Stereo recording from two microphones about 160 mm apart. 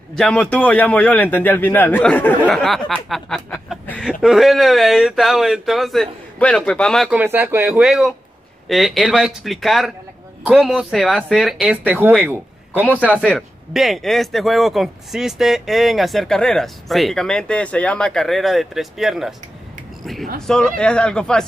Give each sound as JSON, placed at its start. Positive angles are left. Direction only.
{"t": 0.1, "sound": "a man's voice", "side_deg": 5}
{"t": 7.1, "sound": "speech", "side_deg": -10}
{"t": 7.8, "sound": "speech", "side_deg": 0}
{"t": 13.0, "sound": "speech", "side_deg": 5}
{"t": 20.3, "sound": "speech", "side_deg": 5}